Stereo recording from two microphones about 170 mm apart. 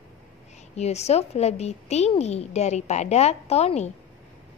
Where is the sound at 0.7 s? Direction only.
40° left (ahead or behind).